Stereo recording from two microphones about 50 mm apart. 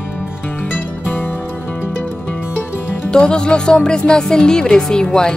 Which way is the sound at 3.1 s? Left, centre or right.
Centre.